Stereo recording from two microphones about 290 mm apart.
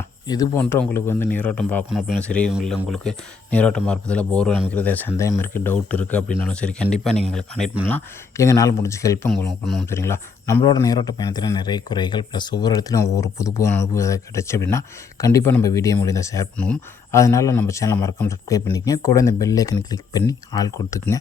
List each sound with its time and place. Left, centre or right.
0.3 s speech: centre